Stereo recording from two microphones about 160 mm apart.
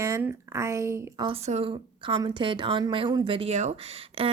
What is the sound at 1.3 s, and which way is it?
A woman's voice, 40° right (ahead or behind).